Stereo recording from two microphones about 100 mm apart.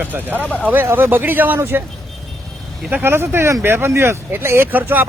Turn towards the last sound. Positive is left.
turn(degrees=-20)  # may be behind; listen again after turning